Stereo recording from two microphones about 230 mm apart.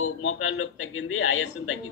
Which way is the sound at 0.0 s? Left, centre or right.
Left.